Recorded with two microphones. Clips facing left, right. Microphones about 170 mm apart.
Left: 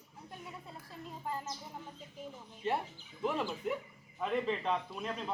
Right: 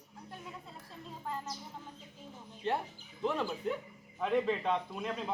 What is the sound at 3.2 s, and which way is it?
A man's voice, 5° left (ahead or behind).